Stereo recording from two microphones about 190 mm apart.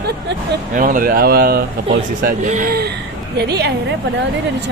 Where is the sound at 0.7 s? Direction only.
45° right (ahead or behind).